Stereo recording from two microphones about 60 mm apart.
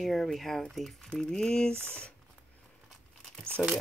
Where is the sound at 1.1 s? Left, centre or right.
Centre.